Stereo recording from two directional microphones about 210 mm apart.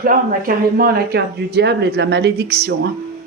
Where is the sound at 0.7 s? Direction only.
50° right (ahead or behind).